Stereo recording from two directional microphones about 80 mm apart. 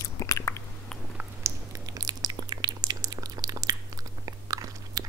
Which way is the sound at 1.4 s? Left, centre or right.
Right.